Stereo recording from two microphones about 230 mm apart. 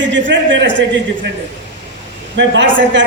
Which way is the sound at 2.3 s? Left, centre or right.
Right.